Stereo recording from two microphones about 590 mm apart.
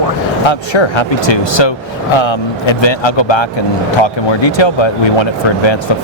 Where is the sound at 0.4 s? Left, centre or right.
Left.